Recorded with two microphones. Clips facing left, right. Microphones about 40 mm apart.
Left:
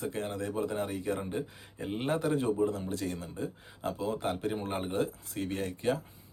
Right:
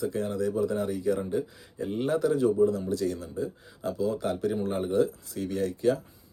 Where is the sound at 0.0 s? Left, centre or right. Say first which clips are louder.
Right 6 dB; left.